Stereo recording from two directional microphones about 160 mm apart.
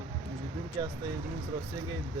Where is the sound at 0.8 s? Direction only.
25° right (ahead or behind).